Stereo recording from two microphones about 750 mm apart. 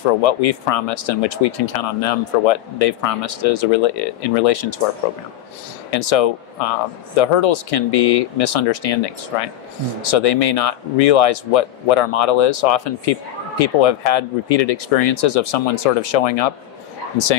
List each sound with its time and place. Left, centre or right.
0.2 s speech: left
5.9 s speech: left